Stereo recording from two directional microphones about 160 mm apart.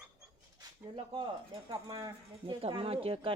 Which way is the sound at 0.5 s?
30° right (ahead or behind).